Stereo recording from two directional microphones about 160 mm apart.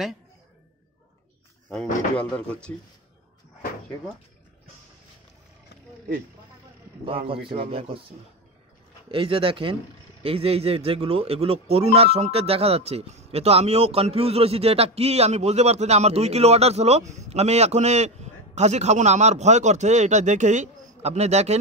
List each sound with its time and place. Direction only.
2.1 s speech: 5° left (ahead or behind)
7.1 s speech: 35° right (ahead or behind)
9.1 s a man's voice: 35° right (ahead or behind)